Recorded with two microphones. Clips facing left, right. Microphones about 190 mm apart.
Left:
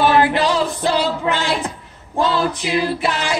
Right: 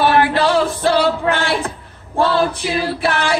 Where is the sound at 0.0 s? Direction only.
20° left (ahead or behind).